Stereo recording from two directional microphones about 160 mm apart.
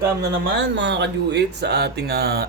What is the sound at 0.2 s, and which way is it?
Speech, 90° right.